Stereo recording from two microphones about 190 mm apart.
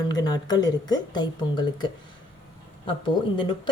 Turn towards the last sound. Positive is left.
turn(degrees=25)  # may be behind; listen again after turning